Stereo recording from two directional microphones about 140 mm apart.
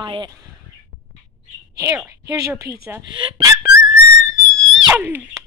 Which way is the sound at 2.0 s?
20° right (ahead or behind).